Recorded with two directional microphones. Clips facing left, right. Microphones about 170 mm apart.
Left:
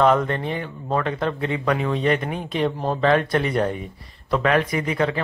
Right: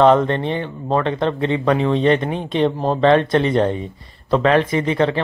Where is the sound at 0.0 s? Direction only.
30° right (ahead or behind).